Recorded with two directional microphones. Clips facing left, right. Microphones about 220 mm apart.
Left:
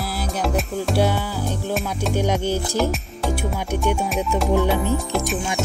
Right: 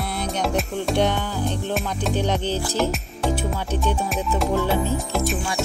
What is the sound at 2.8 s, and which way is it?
Music, centre (ahead or behind).